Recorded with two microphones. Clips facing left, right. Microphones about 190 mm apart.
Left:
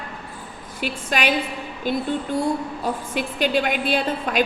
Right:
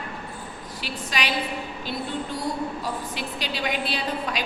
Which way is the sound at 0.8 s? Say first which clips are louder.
Left 6 dB; 50° left (ahead or behind).